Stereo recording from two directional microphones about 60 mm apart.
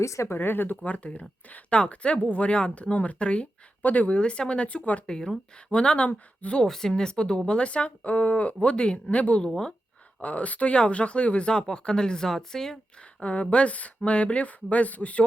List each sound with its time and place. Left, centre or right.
0.0 s speech: left
0.3 s speech: left
0.9 s speech: left
5.0 s speech: centre
6.6 s speech: centre
9.5 s speech: centre
10.2 s speech: left; by 13.2 s centre
13.2 s speech: left